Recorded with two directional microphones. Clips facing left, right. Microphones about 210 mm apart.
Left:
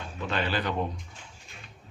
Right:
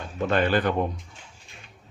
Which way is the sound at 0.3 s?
50° right (ahead or behind).